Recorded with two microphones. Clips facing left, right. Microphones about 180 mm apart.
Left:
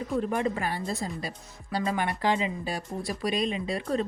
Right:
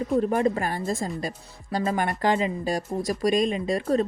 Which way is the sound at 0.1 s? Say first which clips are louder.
Right 5 dB; 40° right (ahead or behind).